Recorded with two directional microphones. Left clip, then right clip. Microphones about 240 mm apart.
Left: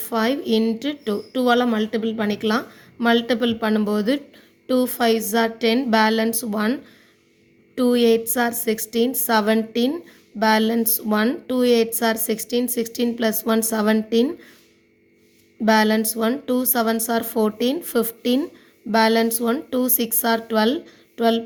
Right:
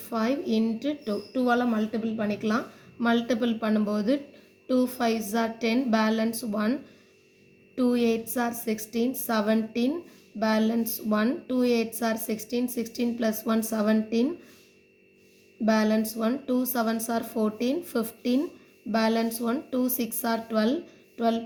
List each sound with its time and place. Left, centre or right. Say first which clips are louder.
0.0 s speech: left 6 dB; left
7.8 s speech: left 8 dB; left
15.6 s speech: left 7 dB; left